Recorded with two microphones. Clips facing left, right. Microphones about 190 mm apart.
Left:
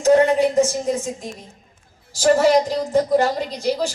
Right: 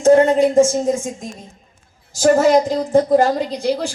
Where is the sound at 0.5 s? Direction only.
50° right (ahead or behind).